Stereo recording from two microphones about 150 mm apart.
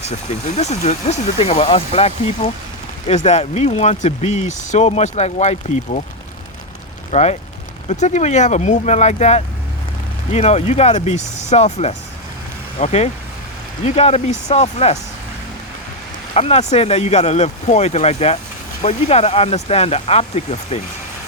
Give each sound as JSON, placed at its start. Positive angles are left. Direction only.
{"t": 0.0, "sound": "speech", "side_deg": 45}
{"t": 7.1, "sound": "speech", "side_deg": 45}
{"t": 16.3, "sound": "speech", "side_deg": 45}